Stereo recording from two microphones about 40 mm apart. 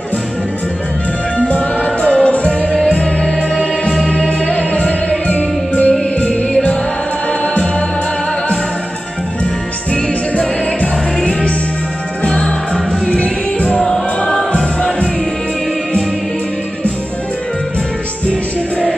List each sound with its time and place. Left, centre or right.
1.5 s music: left
3.0 s music: centre
4.1 s music: left
12.3 s music: left
13.1 s music: left
13.7 s music: centre